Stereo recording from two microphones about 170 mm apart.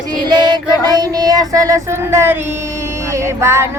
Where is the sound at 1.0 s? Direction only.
20° right (ahead or behind).